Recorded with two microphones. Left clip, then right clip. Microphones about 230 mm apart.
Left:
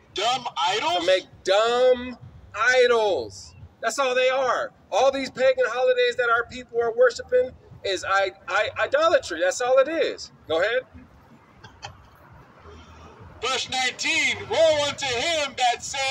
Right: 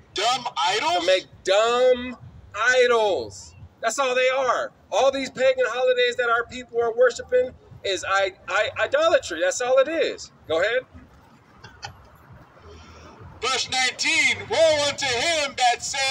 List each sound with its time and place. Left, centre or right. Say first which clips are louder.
0.1 s telephone: right 1 dB; centre
1.4 s a man's voice: right 1 dB; centre
13.4 s a man's voice: right 2 dB; centre